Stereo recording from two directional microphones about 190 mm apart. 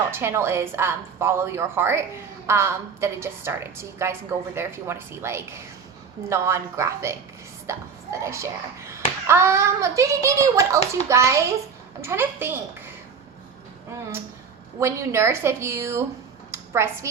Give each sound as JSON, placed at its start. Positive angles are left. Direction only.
{"t": 0.1, "sound": "a woman's voice", "side_deg": -15}
{"t": 14.8, "sound": "a woman's voice", "side_deg": -15}
{"t": 16.5, "sound": "a sound", "side_deg": -15}